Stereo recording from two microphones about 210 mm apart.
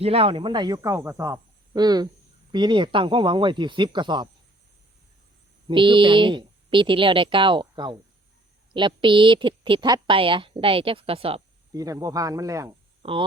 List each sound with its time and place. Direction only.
0.0 s a woman's voice: 25° right (ahead or behind)
5.6 s a woman's voice: 25° right (ahead or behind)
13.0 s speech: 25° right (ahead or behind)